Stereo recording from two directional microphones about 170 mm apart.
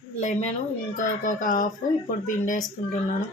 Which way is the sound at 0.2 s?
45° left (ahead or behind).